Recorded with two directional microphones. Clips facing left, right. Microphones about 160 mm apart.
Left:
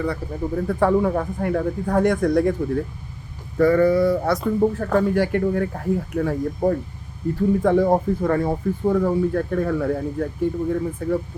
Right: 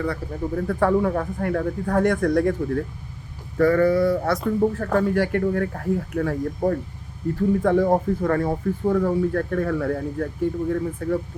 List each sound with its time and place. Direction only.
0.0 s speech: 15° left (ahead or behind)